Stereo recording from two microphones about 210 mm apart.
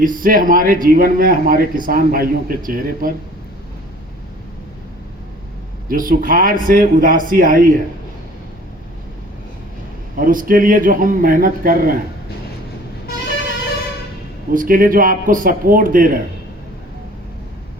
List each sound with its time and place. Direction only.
0.0 s speech: 40° right (ahead or behind)
5.9 s speech: 40° right (ahead or behind)
10.2 s speech: 40° right (ahead or behind)
14.5 s speech: 40° right (ahead or behind)